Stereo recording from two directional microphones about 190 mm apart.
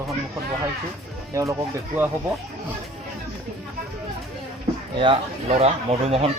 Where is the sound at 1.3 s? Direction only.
15° right (ahead or behind).